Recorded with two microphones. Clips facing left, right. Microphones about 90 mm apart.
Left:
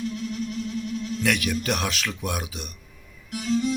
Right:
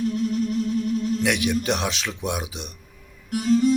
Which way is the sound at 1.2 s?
20° right (ahead or behind).